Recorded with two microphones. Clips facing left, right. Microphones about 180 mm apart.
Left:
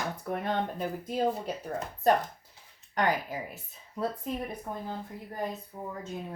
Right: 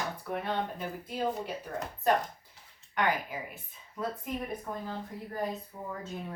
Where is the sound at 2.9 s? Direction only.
40° left (ahead or behind).